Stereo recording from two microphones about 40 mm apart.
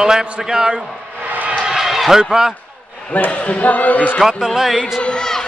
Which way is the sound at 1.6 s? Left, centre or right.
Centre.